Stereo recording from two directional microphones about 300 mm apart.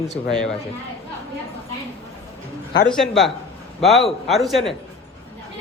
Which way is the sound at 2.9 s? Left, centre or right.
Centre.